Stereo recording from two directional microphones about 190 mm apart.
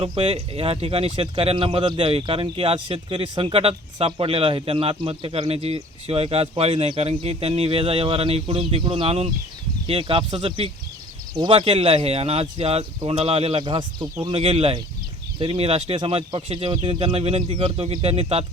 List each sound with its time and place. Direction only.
0.0 s speech: 30° right (ahead or behind)